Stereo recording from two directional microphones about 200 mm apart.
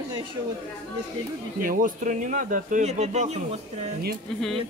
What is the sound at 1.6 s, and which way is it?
Speech, 40° right (ahead or behind).